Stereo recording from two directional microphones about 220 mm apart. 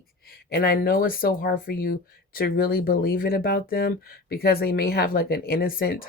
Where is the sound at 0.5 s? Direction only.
45° left (ahead or behind).